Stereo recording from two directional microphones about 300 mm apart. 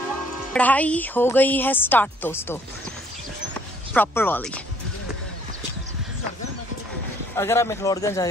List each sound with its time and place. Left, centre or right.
0.5 s a woman's voice: centre
3.9 s a man's voice: centre
7.3 s a man's voice: centre